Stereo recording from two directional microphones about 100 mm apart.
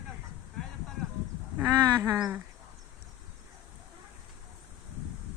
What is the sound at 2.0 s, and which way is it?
Speech, 15° right (ahead or behind).